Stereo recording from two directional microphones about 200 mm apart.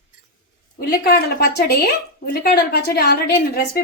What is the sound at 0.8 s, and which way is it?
A woman's voice, 50° left (ahead or behind).